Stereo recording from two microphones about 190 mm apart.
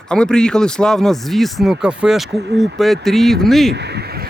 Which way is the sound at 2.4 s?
65° right (ahead or behind).